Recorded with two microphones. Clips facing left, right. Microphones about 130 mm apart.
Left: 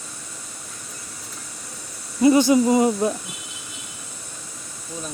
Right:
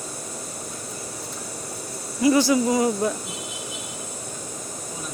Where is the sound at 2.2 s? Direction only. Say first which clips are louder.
Left 3 dB; 20° left (ahead or behind).